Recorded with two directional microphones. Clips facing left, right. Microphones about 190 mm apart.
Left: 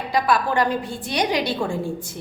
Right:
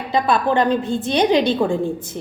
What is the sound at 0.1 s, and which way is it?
A woman's voice, 25° right (ahead or behind).